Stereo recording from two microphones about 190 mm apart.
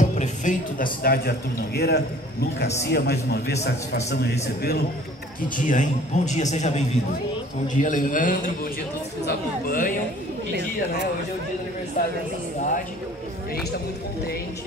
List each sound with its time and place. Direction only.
0.0 s music: 40° left (ahead or behind)
1.0 s a man's voice: 55° left (ahead or behind)
5.7 s a man's voice: 40° left (ahead or behind)